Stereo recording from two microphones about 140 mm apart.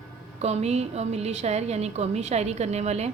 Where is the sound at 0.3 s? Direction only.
50° right (ahead or behind).